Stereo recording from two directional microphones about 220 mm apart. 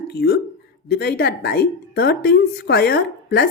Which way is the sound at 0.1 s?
45° left (ahead or behind).